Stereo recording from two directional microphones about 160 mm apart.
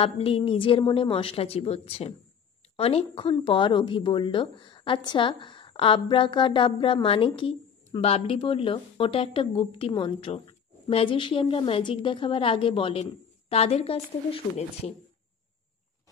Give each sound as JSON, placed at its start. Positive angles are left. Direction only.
{"t": 0.0, "sound": "speech", "side_deg": 35}